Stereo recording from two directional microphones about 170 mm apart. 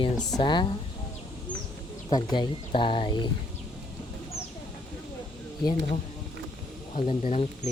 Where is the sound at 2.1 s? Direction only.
25° left (ahead or behind).